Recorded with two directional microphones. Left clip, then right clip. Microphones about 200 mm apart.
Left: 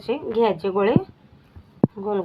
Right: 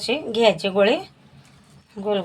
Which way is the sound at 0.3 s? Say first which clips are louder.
Right 3 dB; 20° right (ahead or behind).